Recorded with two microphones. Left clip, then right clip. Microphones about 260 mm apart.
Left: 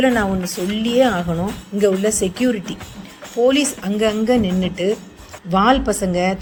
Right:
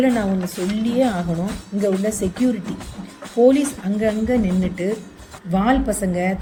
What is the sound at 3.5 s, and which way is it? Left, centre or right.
A woman's voice, centre.